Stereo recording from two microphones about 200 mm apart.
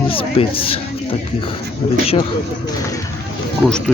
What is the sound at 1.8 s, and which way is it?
Speech, 30° left (ahead or behind).